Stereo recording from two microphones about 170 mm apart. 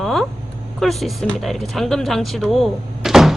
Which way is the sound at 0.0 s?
Centre (ahead or behind).